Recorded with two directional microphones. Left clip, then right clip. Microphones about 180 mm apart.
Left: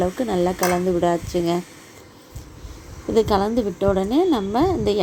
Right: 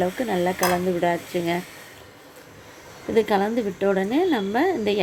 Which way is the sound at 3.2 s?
20° left (ahead or behind).